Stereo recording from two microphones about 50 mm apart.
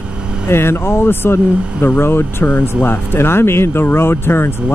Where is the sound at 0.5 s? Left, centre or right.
Left.